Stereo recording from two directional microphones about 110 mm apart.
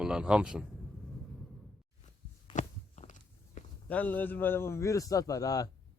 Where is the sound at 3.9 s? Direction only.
15° left (ahead or behind).